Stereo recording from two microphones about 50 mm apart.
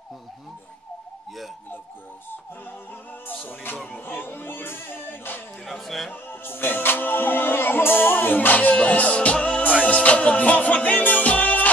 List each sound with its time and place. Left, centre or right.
3.3 s music: left
3.7 s speech: left
4.0 s a sound: left
5.7 s a sound: centre
6.2 s music: left
8.5 s music: left